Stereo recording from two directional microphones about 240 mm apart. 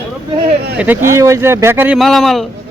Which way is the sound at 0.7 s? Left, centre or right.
Centre.